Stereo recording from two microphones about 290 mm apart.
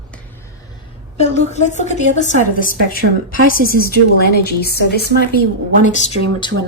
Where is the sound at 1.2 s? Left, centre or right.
Left.